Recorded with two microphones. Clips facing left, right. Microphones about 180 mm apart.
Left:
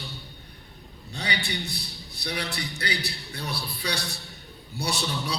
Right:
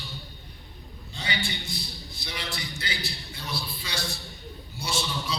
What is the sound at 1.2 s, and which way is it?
A man's voice, 65° left (ahead or behind).